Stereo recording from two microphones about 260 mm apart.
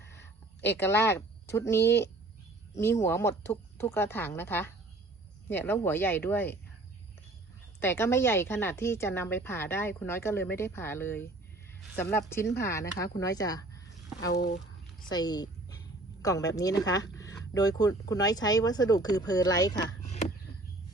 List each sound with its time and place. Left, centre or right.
0.8 s a woman's voice: centre
7.8 s a woman's voice: centre
14.3 s speech: left
15.1 s a woman's voice: centre
20.0 s a sound: left